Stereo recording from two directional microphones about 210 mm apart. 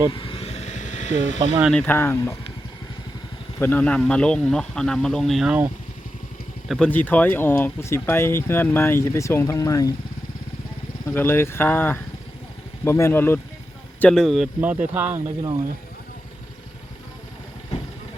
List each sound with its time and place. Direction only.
0.1 s vehicle: 25° left (ahead or behind)
1.6 s speech: 5° left (ahead or behind)
3.6 s speech: 10° left (ahead or behind)
11.1 s speech: 10° left (ahead or behind); by 15.2 s 10° right (ahead or behind)